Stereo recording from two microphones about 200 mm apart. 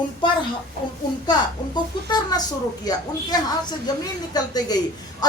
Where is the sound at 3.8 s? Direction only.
20° left (ahead or behind).